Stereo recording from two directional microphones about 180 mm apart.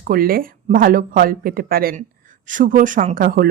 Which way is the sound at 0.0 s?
55° right (ahead or behind).